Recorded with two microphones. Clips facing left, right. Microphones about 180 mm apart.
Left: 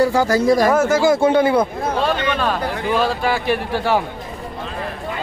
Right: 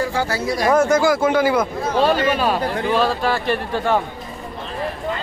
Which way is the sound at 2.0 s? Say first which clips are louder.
Right 4 dB; 35° right (ahead or behind).